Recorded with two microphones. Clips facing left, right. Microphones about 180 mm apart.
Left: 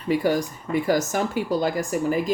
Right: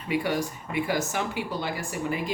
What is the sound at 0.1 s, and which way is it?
Speech, 40° left (ahead or behind).